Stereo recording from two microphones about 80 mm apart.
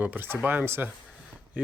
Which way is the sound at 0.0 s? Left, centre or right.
Right.